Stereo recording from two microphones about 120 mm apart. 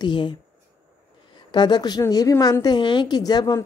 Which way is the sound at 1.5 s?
35° left (ahead or behind).